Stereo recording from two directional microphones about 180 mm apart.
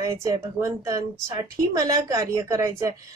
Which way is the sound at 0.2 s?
15° right (ahead or behind).